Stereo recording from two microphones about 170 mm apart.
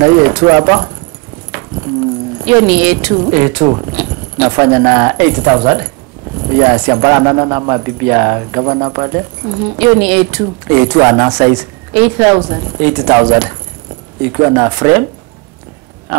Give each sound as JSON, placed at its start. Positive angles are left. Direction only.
{"t": 0.0, "sound": "speech", "side_deg": -20}
{"t": 2.4, "sound": "speech", "side_deg": -10}
{"t": 3.9, "sound": "a sound", "side_deg": -10}
{"t": 4.6, "sound": "speech", "side_deg": -20}
{"t": 11.9, "sound": "speech", "side_deg": -15}